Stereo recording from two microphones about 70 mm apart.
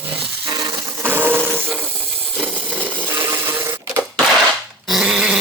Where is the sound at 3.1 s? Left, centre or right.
Right.